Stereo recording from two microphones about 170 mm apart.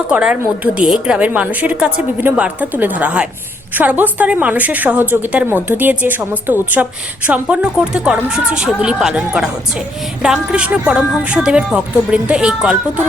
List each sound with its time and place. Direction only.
0.1 s a woman's voice: 5° right (ahead or behind)